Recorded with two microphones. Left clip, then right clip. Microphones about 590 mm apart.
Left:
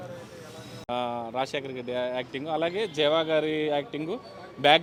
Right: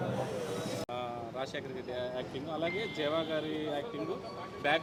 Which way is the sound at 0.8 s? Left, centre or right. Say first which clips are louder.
Left 8 dB; left.